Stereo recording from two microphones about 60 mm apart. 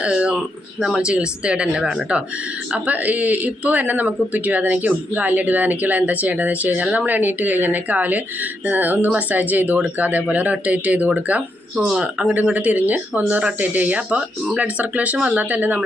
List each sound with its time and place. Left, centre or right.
0.0 s a sound: centre
0.8 s speech: centre
2.7 s speech: right
11.9 s speech: centre
12.5 s speech: right